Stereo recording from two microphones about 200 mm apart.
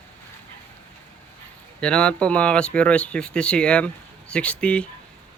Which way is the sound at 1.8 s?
5° left (ahead or behind).